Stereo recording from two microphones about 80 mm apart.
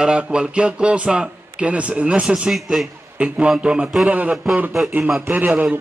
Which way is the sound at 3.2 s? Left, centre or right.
Centre.